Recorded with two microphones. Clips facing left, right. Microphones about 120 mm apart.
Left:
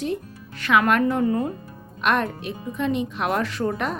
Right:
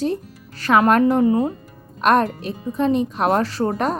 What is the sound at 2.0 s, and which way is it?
Speech, 40° right (ahead or behind).